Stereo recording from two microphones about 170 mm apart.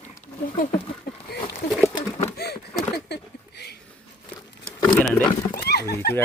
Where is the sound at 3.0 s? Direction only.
75° left (ahead or behind).